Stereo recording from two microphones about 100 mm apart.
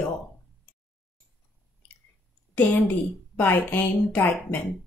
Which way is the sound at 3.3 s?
20° left (ahead or behind).